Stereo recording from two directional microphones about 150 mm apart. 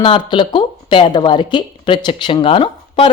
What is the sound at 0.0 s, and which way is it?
A woman's voice, 35° left (ahead or behind).